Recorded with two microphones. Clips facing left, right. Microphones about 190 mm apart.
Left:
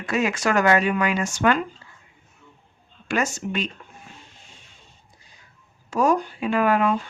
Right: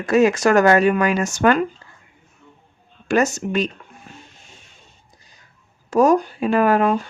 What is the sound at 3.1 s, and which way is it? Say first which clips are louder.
Speech: right 6 dB; 40° right (ahead or behind).